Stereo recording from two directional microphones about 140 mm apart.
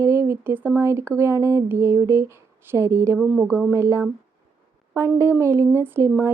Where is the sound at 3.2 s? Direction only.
10° right (ahead or behind).